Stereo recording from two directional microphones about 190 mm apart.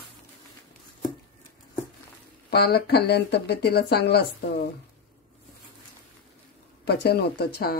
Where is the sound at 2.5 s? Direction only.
55° left (ahead or behind).